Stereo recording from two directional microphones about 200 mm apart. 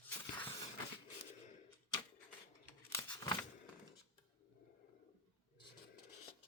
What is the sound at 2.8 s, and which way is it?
Tearing, 10° left (ahead or behind).